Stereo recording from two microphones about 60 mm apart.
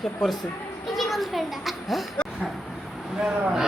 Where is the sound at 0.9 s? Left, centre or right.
Centre.